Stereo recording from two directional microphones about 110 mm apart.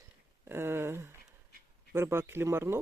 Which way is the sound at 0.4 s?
20° right (ahead or behind).